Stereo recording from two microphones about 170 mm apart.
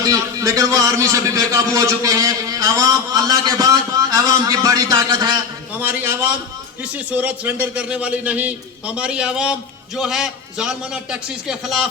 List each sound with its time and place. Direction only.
0.0 s a man's voice: 20° right (ahead or behind); by 11.9 s centre (ahead or behind)